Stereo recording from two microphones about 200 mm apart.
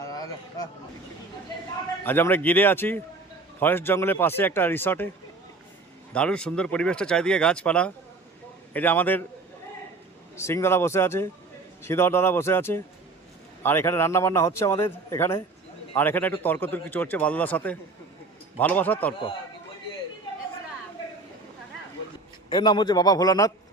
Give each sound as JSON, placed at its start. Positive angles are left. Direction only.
{"t": 0.0, "sound": "a sound", "side_deg": 20}
{"t": 2.0, "sound": "a man's voice", "side_deg": 10}
{"t": 6.1, "sound": "a man's voice", "side_deg": 5}
{"t": 10.3, "sound": "a man's voice", "side_deg": 15}
{"t": 22.4, "sound": "a man's voice", "side_deg": 20}